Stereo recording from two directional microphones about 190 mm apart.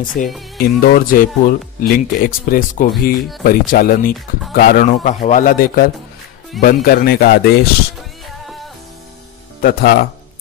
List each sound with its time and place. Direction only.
0.2 s speech: 45° left (ahead or behind)
9.6 s speech: 50° left (ahead or behind)